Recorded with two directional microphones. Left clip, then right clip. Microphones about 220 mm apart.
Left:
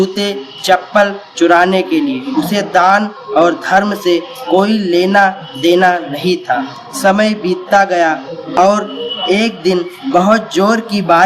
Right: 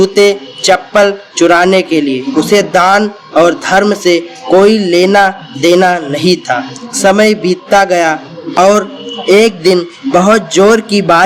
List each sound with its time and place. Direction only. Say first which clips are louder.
0.0 s speech: right 8 dB; 35° right (ahead or behind)